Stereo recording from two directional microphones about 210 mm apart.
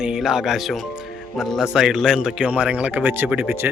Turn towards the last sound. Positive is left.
turn(degrees=-10)  # may be behind; listen again after turning